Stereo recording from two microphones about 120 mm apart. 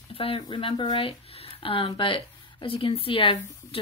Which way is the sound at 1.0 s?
55° left (ahead or behind).